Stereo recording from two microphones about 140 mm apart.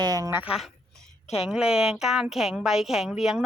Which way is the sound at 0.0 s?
25° right (ahead or behind).